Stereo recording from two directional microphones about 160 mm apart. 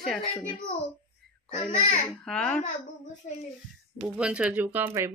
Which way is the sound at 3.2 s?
50° left (ahead or behind).